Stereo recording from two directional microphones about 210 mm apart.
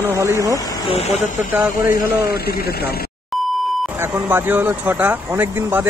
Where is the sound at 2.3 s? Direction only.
45° left (ahead or behind).